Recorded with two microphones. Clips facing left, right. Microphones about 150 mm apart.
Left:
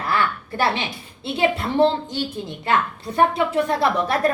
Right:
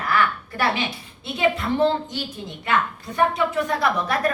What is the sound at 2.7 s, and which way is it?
A woman's voice, 30° left (ahead or behind).